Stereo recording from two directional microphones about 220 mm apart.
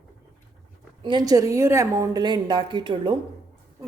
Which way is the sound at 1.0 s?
20° right (ahead or behind).